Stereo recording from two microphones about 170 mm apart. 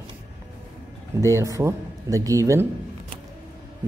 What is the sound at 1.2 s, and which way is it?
Speech, 20° right (ahead or behind).